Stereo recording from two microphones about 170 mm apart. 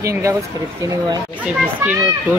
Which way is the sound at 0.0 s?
15° right (ahead or behind).